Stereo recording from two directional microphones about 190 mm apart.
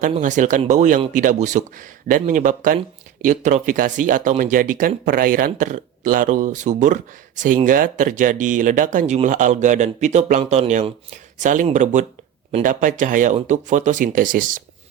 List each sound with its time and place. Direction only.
0.1 s speech: 40° right (ahead or behind)